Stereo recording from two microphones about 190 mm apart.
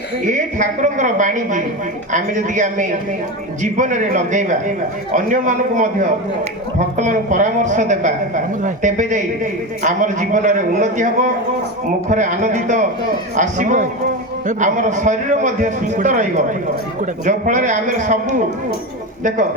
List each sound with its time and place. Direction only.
0.3 s a man's voice: 40° right (ahead or behind)